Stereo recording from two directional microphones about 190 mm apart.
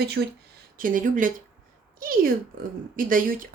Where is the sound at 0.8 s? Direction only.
45° right (ahead or behind).